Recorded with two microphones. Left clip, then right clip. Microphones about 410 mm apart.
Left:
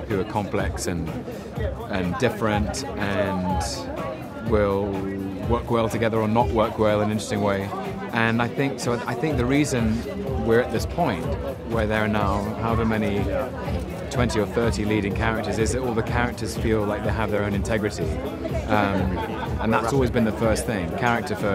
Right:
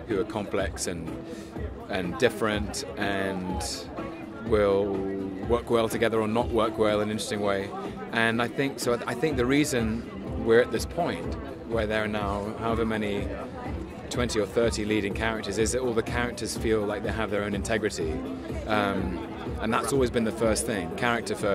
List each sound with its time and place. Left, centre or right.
0.1 s speech: right
2.0 s speech: right